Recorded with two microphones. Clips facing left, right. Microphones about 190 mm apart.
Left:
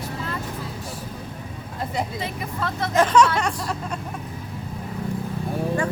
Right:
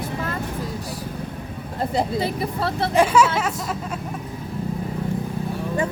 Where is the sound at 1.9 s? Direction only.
35° right (ahead or behind).